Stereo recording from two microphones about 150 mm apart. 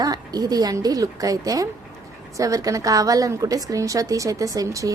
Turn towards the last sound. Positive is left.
turn(degrees=-20)  # may be behind; listen again after turning